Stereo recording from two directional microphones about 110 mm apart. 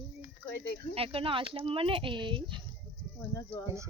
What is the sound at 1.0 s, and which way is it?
Speech, 55° right (ahead or behind).